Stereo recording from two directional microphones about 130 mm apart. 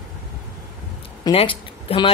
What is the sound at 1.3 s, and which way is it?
Speech, 45° left (ahead or behind).